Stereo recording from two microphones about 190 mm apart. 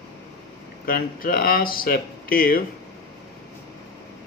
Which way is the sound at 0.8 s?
50° left (ahead or behind).